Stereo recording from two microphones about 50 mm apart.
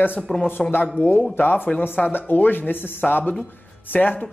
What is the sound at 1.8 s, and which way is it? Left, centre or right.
A woman's voice, left.